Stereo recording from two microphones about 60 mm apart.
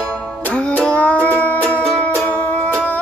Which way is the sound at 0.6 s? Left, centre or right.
Centre.